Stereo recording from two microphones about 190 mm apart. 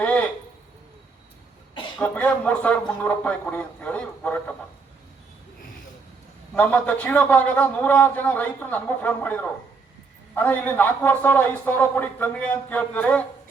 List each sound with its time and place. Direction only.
0.0 s a sound: 5° left (ahead or behind)
2.0 s a man's voice: 10° left (ahead or behind)
6.5 s a man's voice: 5° left (ahead or behind)